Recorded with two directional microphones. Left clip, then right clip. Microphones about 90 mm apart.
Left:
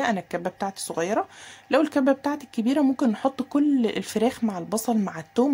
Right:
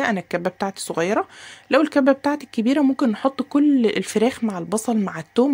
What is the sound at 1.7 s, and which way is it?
Speech, 30° right (ahead or behind).